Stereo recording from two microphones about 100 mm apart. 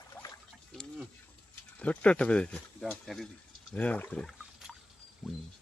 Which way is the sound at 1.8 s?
15° left (ahead or behind).